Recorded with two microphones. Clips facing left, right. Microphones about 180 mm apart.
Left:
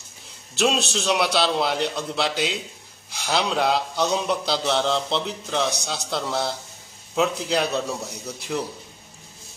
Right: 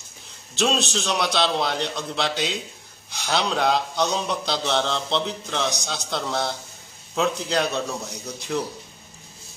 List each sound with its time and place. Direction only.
0.6 s speech: 5° left (ahead or behind)